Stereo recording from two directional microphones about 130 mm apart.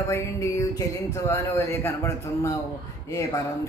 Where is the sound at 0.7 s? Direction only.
20° left (ahead or behind).